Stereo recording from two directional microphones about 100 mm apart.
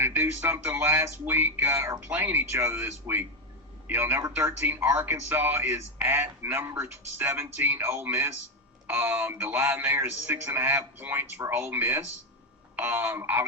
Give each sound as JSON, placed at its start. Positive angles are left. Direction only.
{"t": 0.0, "sound": "speech", "side_deg": -20}